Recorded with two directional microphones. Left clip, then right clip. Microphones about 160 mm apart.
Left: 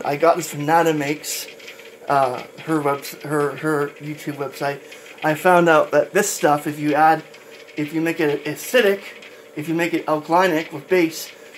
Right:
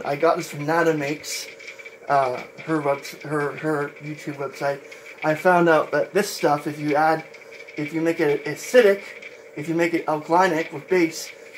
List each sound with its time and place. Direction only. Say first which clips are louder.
0.0 s speech: left 3 dB; 40° left (ahead or behind)